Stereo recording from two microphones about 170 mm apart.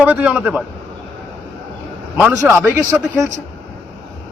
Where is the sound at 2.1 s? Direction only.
15° right (ahead or behind).